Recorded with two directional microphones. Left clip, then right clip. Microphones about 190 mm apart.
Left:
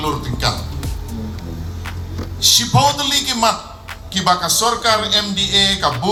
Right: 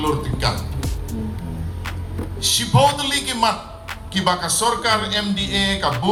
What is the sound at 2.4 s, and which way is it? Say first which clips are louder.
A man's voice: left 3 dB; 20° left (ahead or behind).